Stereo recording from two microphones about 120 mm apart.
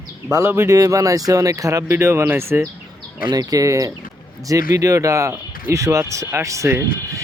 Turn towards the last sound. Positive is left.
turn(degrees=-25)  # may be behind; listen again after turning